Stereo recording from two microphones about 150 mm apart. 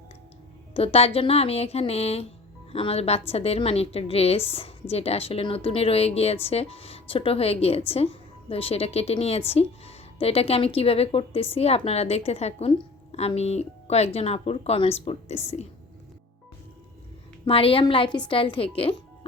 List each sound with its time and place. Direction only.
0.7 s a woman's voice: 40° left (ahead or behind)
17.4 s a woman's voice: 40° left (ahead or behind)